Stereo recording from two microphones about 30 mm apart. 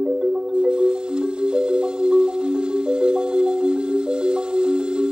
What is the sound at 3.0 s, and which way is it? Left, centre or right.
Music, right.